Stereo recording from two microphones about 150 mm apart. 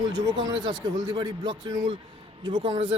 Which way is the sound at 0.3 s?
30° right (ahead or behind).